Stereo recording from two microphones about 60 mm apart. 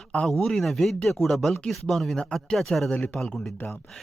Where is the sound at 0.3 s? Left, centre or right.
Centre.